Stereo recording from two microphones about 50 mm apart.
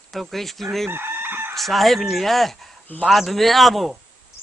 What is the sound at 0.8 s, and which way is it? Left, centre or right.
Chicken, right.